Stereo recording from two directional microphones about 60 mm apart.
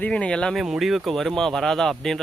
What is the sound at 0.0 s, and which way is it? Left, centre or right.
Speech, centre.